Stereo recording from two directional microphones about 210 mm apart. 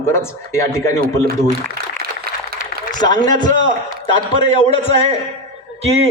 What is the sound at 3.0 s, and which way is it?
A man's voice, 20° left (ahead or behind).